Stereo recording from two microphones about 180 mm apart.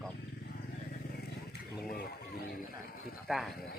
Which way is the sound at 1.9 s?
60° left (ahead or behind).